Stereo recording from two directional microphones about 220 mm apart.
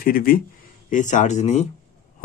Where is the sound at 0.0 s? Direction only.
40° left (ahead or behind).